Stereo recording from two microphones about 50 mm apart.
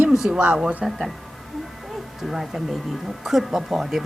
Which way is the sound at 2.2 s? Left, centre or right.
Centre.